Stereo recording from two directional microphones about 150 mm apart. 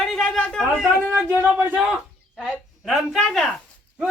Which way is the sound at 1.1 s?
10° right (ahead or behind).